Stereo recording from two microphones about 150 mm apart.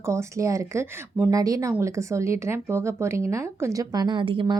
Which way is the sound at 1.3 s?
25° right (ahead or behind).